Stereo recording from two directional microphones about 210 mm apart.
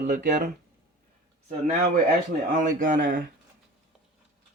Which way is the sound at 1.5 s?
35° right (ahead or behind).